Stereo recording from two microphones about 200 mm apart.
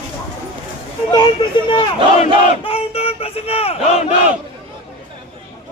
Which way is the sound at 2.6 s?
30° left (ahead or behind).